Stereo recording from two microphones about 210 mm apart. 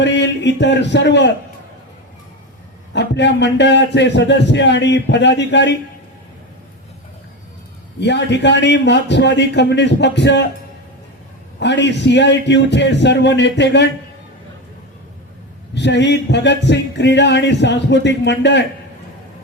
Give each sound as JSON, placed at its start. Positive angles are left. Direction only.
{"t": 0.0, "sound": "a man's voice", "side_deg": 55}
{"t": 2.9, "sound": "speech", "side_deg": 55}
{"t": 8.0, "sound": "speech", "side_deg": 55}
{"t": 11.6, "sound": "speech", "side_deg": 55}
{"t": 15.7, "sound": "speech", "side_deg": 55}